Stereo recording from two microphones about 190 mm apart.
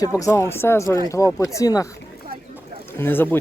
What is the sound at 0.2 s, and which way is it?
Speech, 15° left (ahead or behind).